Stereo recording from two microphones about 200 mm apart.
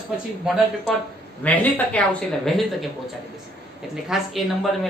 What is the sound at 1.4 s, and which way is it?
Speech, 5° left (ahead or behind).